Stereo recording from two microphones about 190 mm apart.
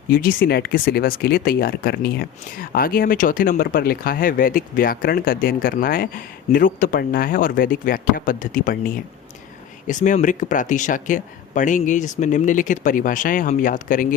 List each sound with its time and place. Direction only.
0.1 s speech: 50° left (ahead or behind)